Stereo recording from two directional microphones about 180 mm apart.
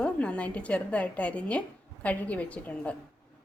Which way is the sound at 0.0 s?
5° left (ahead or behind).